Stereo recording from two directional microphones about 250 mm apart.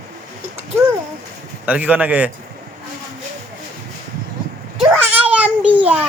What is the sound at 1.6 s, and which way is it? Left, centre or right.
Speech, centre.